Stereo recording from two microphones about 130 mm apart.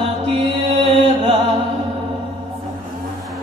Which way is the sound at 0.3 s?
50° right (ahead or behind).